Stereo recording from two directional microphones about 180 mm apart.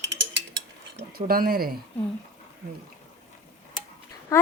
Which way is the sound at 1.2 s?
55° right (ahead or behind).